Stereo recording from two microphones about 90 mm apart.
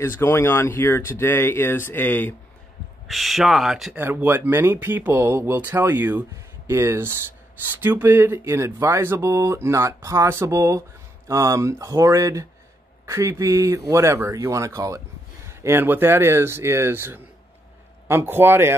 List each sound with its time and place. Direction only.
0.0 s speech: 30° left (ahead or behind)
3.1 s speech: centre (ahead or behind)
4.0 s speech: 25° right (ahead or behind)